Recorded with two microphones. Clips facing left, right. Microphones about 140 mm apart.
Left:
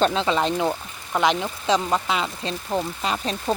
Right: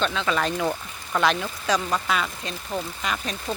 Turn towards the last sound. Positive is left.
turn(degrees=30)  # may be behind; listen again after turning